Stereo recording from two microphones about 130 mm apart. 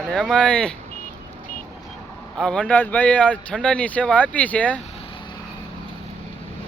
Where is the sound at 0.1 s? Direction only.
5° left (ahead or behind).